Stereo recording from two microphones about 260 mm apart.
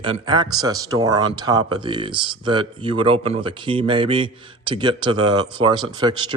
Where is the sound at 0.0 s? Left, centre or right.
Centre.